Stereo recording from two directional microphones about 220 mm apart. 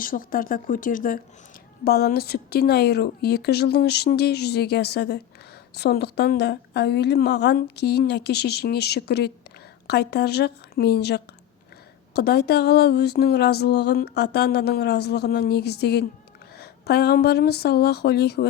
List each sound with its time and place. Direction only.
0.0 s speech: 40° left (ahead or behind)